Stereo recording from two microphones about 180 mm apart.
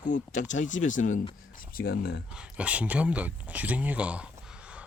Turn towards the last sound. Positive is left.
turn(degrees=-5)  # may be behind; listen again after turning